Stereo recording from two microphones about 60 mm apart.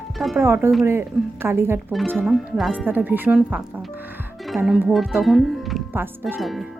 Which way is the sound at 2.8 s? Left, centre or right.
Right.